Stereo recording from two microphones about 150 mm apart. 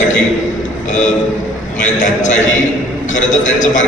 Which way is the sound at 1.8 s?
55° left (ahead or behind).